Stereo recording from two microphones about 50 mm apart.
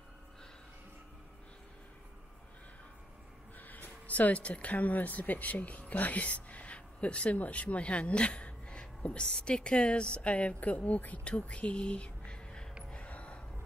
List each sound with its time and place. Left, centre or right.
3.5 s speech: left
12.9 s gasp: left